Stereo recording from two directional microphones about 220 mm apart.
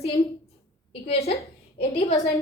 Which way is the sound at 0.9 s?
30° left (ahead or behind).